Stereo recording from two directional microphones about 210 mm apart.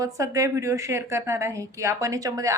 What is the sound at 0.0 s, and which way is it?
A woman's voice, 15° right (ahead or behind).